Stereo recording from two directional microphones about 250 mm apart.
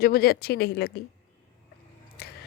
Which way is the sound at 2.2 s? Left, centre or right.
Left.